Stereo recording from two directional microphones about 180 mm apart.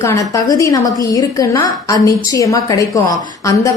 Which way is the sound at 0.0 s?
15° left (ahead or behind).